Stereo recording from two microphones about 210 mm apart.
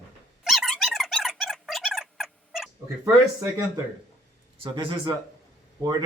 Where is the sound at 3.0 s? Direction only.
15° right (ahead or behind).